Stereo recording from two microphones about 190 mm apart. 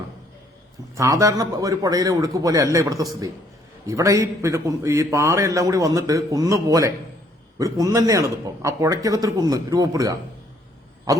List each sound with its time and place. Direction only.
0.9 s a man's voice: 15° right (ahead or behind)